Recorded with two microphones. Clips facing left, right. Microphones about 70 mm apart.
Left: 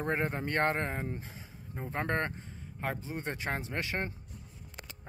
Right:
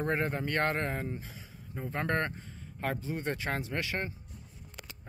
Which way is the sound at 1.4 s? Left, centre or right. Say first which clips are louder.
Right 1 dB; centre.